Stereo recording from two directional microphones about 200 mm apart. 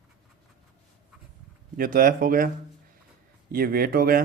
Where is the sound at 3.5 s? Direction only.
50° right (ahead or behind).